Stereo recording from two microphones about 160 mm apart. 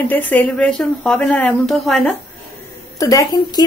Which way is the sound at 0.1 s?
10° left (ahead or behind).